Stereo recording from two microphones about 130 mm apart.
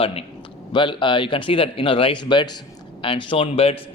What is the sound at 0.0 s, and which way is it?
Speech, 45° left (ahead or behind).